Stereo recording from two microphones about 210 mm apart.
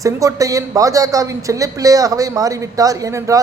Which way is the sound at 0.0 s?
15° right (ahead or behind).